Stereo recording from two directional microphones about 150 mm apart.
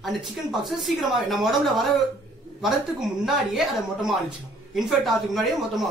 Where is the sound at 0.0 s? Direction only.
Centre (ahead or behind).